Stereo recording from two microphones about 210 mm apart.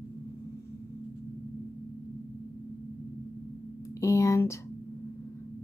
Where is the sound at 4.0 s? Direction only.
15° left (ahead or behind).